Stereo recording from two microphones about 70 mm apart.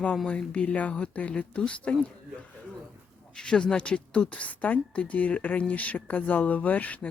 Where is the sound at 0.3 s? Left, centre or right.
Centre.